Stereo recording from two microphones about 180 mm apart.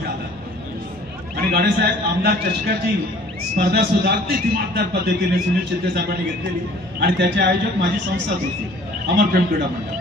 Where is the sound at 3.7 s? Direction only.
65° right (ahead or behind).